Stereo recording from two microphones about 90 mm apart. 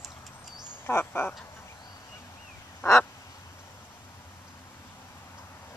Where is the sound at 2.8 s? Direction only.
35° left (ahead or behind).